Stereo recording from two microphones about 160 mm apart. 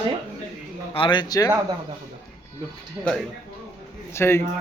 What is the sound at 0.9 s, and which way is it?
Speech, 30° left (ahead or behind).